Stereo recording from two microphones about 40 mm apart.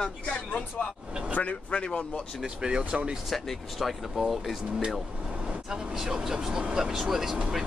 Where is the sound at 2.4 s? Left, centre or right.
Right.